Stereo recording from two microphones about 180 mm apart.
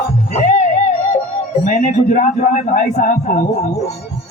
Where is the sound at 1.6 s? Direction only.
45° left (ahead or behind).